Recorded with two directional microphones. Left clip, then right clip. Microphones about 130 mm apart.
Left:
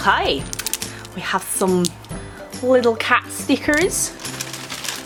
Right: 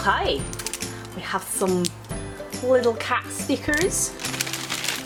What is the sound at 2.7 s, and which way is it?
Speech, 35° left (ahead or behind).